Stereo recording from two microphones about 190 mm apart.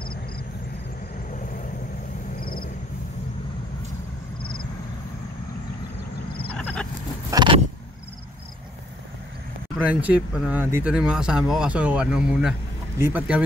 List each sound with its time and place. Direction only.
2.4 s vehicle: 50° left (ahead or behind)
6.5 s a sound: 5° left (ahead or behind)
7.2 s vehicle: 25° right (ahead or behind)
9.8 s speech: 10° right (ahead or behind)